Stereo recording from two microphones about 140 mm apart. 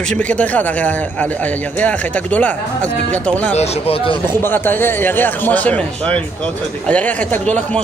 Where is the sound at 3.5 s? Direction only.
50° left (ahead or behind).